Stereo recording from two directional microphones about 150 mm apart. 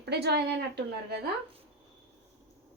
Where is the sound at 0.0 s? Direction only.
90° right.